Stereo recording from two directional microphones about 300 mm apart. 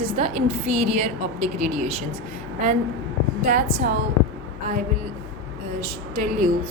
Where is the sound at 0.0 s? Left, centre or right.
Centre.